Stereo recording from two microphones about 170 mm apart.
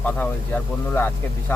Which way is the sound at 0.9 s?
10° left (ahead or behind).